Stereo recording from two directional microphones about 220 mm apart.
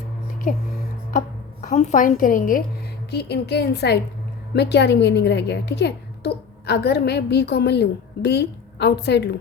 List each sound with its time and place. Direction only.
1.6 s a woman's voice: 35° left (ahead or behind)
3.1 s a woman's voice: 50° left (ahead or behind)